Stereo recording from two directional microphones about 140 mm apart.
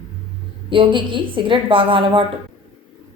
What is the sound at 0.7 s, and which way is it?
A woman's voice, 35° right (ahead or behind).